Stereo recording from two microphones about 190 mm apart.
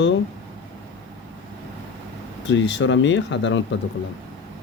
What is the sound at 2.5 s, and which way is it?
Speech, 75° left (ahead or behind).